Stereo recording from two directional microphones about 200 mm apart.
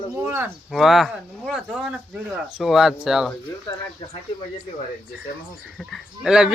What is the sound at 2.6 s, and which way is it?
Speech, centre (ahead or behind).